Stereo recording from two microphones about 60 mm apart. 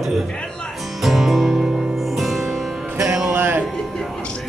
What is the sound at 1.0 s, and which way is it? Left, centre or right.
Music, centre.